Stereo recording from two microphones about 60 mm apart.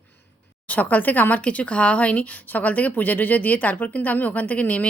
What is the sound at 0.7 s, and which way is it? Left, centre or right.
A woman's voice, left.